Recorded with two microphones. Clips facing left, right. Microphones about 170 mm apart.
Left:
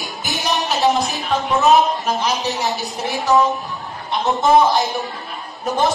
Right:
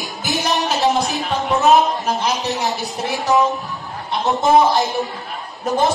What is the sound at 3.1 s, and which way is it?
Speech, 20° right (ahead or behind).